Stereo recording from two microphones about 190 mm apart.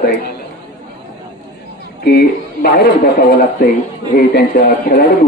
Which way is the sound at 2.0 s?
55° left (ahead or behind).